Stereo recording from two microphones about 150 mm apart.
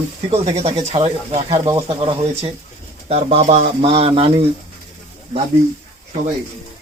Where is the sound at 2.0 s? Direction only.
35° right (ahead or behind).